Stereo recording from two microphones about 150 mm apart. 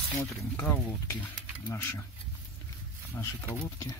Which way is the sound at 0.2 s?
15° left (ahead or behind).